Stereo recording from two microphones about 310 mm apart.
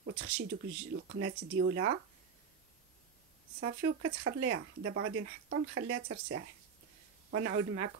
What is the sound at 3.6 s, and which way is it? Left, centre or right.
Speech, right.